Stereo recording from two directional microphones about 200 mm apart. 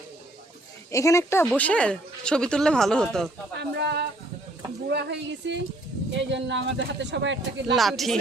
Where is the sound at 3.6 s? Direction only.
60° right (ahead or behind).